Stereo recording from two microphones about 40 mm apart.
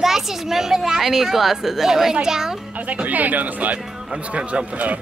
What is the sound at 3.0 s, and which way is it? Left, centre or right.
A man's voice, right.